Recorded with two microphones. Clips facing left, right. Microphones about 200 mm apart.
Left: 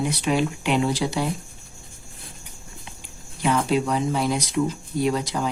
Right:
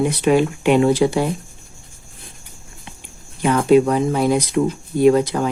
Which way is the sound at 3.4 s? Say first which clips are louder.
Right 8 dB; 50° right (ahead or behind).